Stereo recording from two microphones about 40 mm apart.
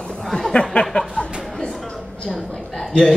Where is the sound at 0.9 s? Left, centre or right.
Left.